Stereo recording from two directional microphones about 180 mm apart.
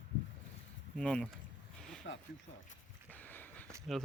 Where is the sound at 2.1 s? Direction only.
75° left (ahead or behind).